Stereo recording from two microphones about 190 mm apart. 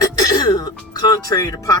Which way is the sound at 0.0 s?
20° left (ahead or behind).